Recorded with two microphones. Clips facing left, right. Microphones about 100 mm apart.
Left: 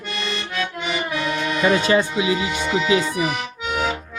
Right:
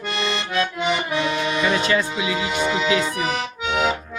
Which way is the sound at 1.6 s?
25° left (ahead or behind).